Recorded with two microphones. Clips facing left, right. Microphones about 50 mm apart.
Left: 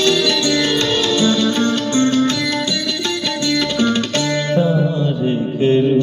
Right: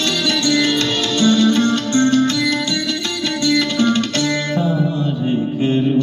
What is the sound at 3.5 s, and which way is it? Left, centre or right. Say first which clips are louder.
Music: right 1 dB; left.